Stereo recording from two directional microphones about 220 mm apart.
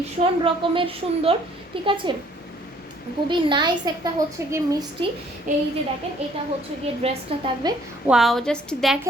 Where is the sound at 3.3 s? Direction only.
20° right (ahead or behind).